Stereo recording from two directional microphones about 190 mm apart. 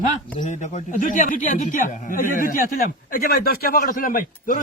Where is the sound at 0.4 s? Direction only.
40° left (ahead or behind).